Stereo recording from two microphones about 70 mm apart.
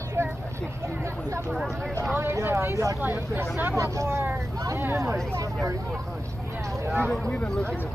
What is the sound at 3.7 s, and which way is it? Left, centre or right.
Speech, right.